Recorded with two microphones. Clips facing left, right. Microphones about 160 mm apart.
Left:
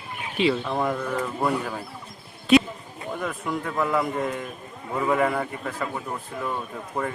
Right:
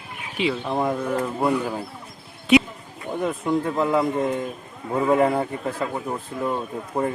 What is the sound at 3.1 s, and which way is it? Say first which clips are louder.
Speech: right 7 dB; 25° right (ahead or behind).